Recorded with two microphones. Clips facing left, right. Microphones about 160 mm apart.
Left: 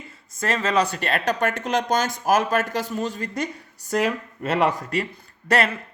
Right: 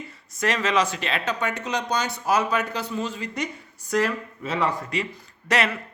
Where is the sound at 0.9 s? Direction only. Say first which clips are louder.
Left 4 dB; 45° left (ahead or behind).